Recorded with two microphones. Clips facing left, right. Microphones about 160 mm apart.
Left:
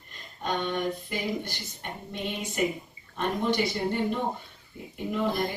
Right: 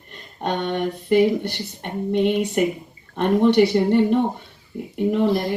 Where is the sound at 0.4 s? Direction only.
60° right (ahead or behind).